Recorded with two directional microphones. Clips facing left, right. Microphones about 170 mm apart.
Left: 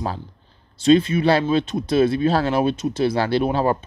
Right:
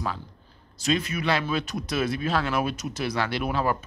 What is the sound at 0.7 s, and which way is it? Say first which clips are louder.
Speech: left 11 dB; 30° left (ahead or behind).